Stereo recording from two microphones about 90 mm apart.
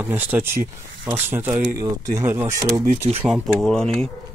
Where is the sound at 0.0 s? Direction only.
20° right (ahead or behind).